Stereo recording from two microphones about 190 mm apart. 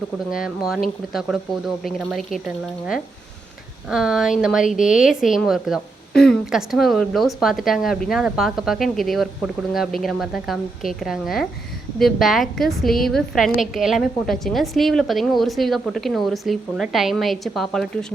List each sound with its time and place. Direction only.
0.3 s speech: 5° right (ahead or behind)
3.8 s speech: 5° right (ahead or behind)